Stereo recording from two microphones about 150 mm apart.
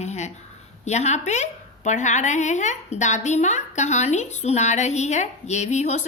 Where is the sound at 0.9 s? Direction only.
50° left (ahead or behind).